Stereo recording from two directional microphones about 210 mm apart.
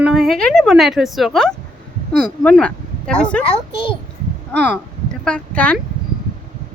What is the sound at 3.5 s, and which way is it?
Speech, 25° left (ahead or behind).